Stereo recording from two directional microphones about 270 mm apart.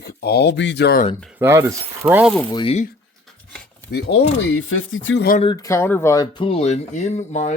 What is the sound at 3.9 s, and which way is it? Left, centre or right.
Speech, left.